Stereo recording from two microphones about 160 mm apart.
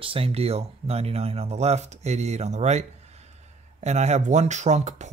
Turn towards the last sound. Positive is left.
turn(degrees=-45)  # may be behind; listen again after turning